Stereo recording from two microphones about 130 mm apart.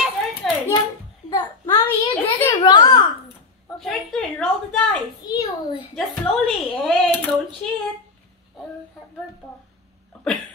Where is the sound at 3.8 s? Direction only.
5° left (ahead or behind).